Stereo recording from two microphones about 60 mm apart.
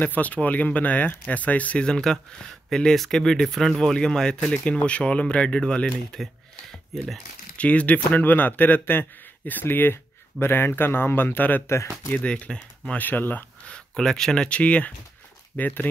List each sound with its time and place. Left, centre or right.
0.0 s speech: left
1.9 s speech: centre
4.7 s speech: left
7.5 s speech: left
11.7 s speech: left
12.1 s speech: left
13.7 s speech: centre; by 15.9 s left